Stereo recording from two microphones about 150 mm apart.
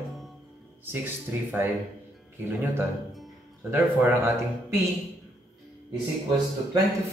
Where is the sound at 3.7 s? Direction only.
20° right (ahead or behind).